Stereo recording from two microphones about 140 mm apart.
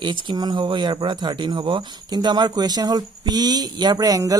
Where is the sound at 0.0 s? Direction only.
35° right (ahead or behind).